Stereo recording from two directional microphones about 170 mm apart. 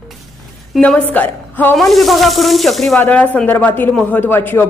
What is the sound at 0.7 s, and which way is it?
A woman's voice, 5° left (ahead or behind).